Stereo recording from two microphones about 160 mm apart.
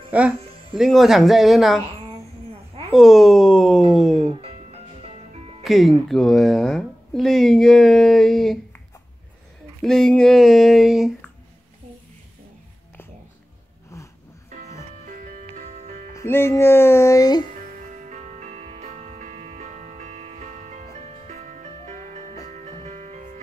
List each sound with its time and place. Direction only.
0.1 s speech: 10° right (ahead or behind)
2.9 s speech: centre (ahead or behind)
5.6 s speech: centre (ahead or behind)
9.8 s speech: 5° left (ahead or behind)
13.9 s a sound: 20° left (ahead or behind)
15.0 s music: 55° right (ahead or behind)
16.1 s speech: 15° left (ahead or behind)
17.9 s music: 50° right (ahead or behind)